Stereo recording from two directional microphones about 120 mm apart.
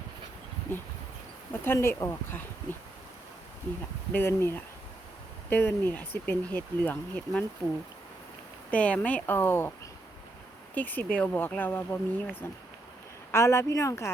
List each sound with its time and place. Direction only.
1.6 s speech: 20° left (ahead or behind)
4.1 s speech: 20° left (ahead or behind)
8.7 s speech: 10° left (ahead or behind)
10.8 s speech: 15° left (ahead or behind)